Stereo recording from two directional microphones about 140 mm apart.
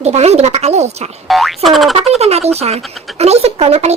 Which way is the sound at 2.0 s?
50° right (ahead or behind).